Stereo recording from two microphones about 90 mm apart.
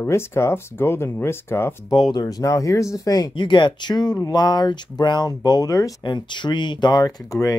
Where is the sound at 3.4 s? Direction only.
60° left (ahead or behind); by 6.1 s 40° left (ahead or behind).